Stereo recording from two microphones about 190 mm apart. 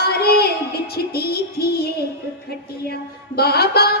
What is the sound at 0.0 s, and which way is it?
Music, 55° left (ahead or behind).